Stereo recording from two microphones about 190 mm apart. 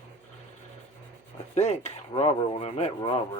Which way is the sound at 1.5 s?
35° left (ahead or behind).